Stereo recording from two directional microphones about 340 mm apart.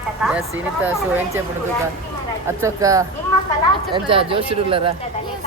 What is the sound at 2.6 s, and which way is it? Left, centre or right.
Speech, centre.